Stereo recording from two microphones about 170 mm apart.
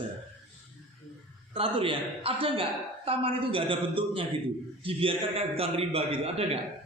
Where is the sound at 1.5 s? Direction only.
30° right (ahead or behind).